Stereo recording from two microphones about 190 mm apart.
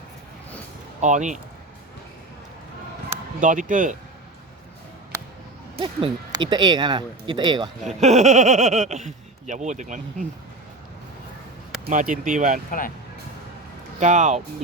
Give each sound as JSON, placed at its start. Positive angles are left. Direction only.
{"t": 1.0, "sound": "speech", "side_deg": -40}
{"t": 3.4, "sound": "speech", "side_deg": -45}
{"t": 5.8, "sound": "speech", "side_deg": -25}
{"t": 7.9, "sound": "speech", "side_deg": -35}
{"t": 11.9, "sound": "speech", "side_deg": -45}
{"t": 14.0, "sound": "speech", "side_deg": -40}